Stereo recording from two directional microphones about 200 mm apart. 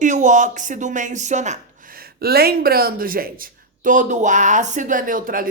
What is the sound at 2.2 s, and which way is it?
A woman's voice, 50° right (ahead or behind).